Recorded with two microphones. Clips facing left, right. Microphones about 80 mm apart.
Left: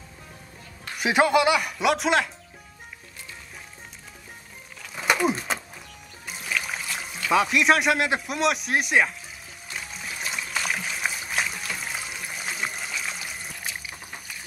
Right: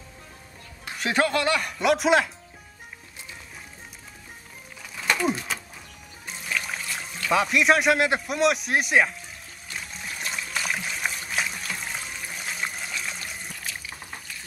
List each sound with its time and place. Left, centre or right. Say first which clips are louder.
0.9 s speech: left 4 dB; centre
4.9 s a sound: left 2 dB; centre
6.2 s speech: left 1 dB; centre
9.8 s trickle: even; centre
13.7 s liquid: left 1 dB; centre